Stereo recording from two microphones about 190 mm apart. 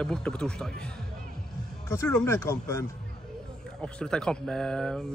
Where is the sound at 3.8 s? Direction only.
5° left (ahead or behind).